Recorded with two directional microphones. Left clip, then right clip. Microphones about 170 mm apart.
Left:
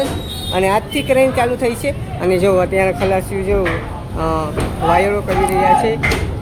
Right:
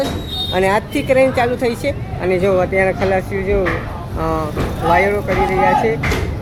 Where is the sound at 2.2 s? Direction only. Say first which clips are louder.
Left 2 dB; 20° left (ahead or behind).